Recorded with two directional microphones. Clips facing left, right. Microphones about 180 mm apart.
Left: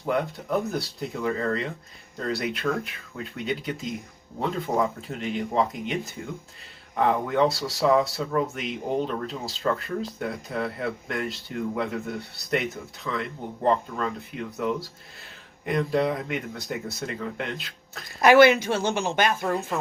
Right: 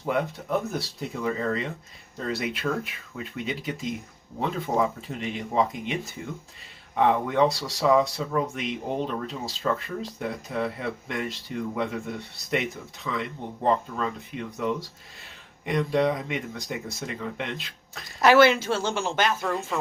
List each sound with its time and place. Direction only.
0.0 s speech: centre (ahead or behind)
18.2 s speech: 15° left (ahead or behind)